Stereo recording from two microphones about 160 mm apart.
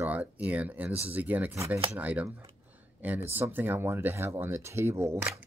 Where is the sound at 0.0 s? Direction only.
10° right (ahead or behind).